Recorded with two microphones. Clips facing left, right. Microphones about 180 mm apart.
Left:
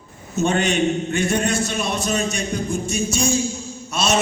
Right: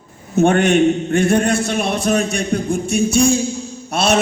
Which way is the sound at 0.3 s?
55° right (ahead or behind).